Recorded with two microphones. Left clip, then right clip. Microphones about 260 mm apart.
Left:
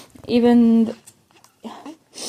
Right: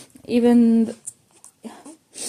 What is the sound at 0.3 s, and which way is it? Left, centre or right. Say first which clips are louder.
Speech: left 1 dB; left.